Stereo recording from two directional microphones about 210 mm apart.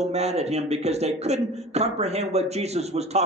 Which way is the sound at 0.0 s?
30° right (ahead or behind).